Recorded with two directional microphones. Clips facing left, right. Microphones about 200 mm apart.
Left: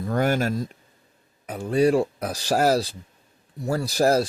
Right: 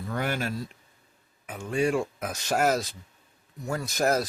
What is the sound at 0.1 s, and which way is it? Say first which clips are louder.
Speech: left 7 dB; 45° left (ahead or behind).